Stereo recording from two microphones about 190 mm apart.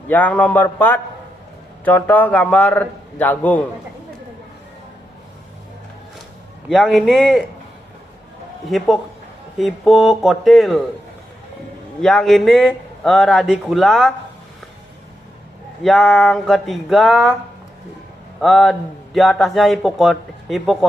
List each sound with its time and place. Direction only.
0.1 s a man's voice: 10° left (ahead or behind)
6.7 s speech: centre (ahead or behind)
9.6 s speech: centre (ahead or behind)
11.9 s speech: centre (ahead or behind)
15.8 s speech: centre (ahead or behind)
18.3 s speech: centre (ahead or behind)